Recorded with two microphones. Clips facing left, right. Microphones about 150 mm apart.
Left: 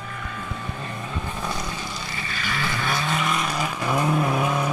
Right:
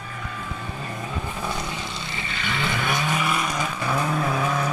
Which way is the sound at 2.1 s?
20° right (ahead or behind).